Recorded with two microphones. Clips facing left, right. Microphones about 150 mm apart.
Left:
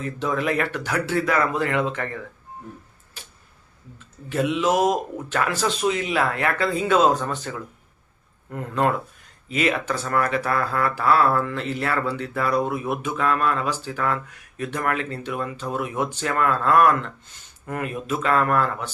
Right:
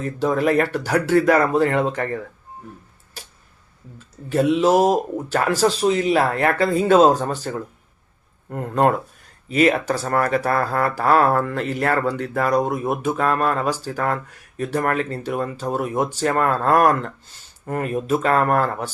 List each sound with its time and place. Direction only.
0.0 s speech: 40° right (ahead or behind)
3.2 s a sound: 40° right (ahead or behind)
3.9 s speech: 40° right (ahead or behind)